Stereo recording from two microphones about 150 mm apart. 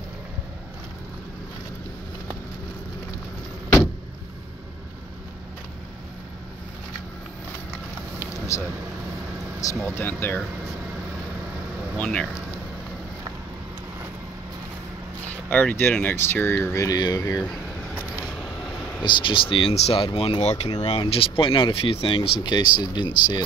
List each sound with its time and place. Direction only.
8.3 s vehicle: 20° left (ahead or behind)
9.6 s speech: 20° left (ahead or behind)
12.0 s speech: 10° left (ahead or behind)
15.2 s speech: 10° left (ahead or behind)
18.4 s vehicle: centre (ahead or behind)
19.0 s speech: 30° left (ahead or behind)